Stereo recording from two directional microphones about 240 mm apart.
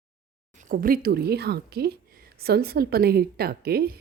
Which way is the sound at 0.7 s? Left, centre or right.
Right.